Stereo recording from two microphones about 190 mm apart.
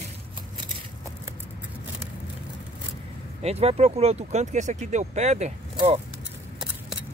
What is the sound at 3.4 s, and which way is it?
Speech, 35° right (ahead or behind).